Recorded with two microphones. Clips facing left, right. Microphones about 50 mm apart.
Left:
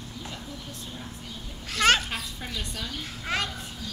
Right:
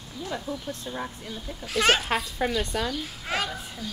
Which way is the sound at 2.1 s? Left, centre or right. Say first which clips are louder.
Right 9 dB; right.